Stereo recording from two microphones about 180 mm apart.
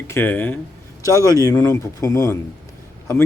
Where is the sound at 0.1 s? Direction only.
10° left (ahead or behind).